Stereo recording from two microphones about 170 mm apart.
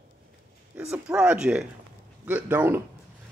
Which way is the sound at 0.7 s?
5° right (ahead or behind).